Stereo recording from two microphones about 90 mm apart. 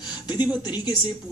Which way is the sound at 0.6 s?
55° left (ahead or behind).